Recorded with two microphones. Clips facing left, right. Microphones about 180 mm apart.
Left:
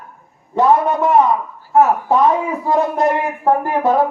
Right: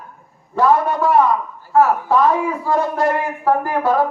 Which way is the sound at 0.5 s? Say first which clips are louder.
Left 2 dB; 20° left (ahead or behind).